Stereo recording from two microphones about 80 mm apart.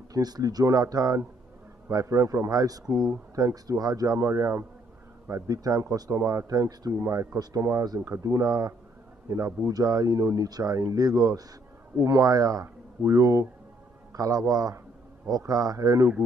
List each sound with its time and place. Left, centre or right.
0.1 s a man's voice: right
2.5 s speech: right
4.2 s a man's voice: right
5.3 s speech: right
6.9 s a man's voice: right